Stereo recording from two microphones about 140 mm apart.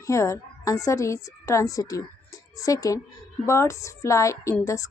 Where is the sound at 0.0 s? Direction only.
20° left (ahead or behind).